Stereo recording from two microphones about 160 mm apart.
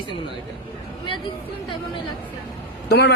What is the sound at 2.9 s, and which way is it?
Speech, 90° left.